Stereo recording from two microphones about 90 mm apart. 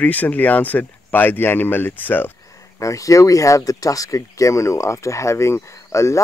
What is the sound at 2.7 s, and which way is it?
Speech, 35° left (ahead or behind).